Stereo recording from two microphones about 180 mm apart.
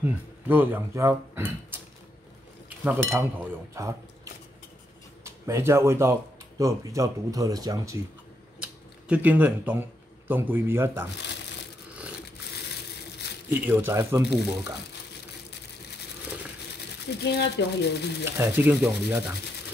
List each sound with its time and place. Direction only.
0.0 s speech: 10° right (ahead or behind)
3.7 s speech: 15° right (ahead or behind)
9.1 s a man's voice: 10° right (ahead or behind)
13.5 s a man's voice: 10° right (ahead or behind)
17.2 s speech: 70° left (ahead or behind)
18.4 s a man's voice: 10° right (ahead or behind)